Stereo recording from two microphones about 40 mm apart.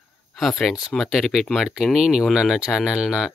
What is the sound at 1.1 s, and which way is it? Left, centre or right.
Speech, centre.